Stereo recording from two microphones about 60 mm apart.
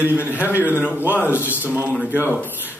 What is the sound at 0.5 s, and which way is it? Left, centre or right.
Speech, left.